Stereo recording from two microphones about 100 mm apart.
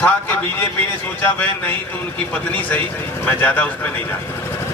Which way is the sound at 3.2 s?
15° left (ahead or behind).